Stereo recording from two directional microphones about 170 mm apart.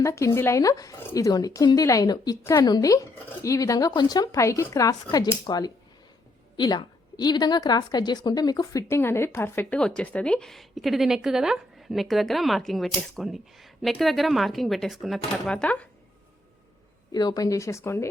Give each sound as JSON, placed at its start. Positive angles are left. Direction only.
{"t": 0.0, "sound": "a woman's voice", "side_deg": 15}
{"t": 17.1, "sound": "speech", "side_deg": 25}